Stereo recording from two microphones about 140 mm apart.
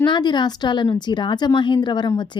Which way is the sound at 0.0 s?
30° left (ahead or behind).